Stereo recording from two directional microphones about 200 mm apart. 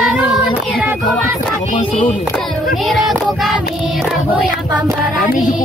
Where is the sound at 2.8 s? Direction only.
Centre (ahead or behind).